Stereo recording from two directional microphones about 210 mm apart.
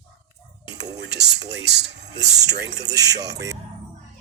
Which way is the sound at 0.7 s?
55° right (ahead or behind).